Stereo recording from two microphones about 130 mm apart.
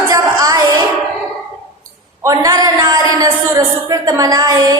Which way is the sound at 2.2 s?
25° right (ahead or behind).